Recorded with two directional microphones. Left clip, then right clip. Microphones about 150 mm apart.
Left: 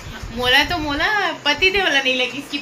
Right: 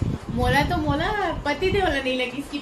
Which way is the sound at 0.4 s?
15° right (ahead or behind).